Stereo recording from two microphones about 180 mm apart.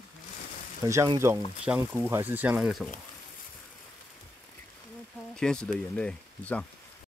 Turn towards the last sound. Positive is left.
turn(degrees=5)  # may be behind; listen again after turning